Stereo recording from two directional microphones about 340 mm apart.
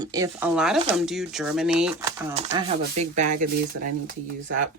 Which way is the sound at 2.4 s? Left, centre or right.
Centre.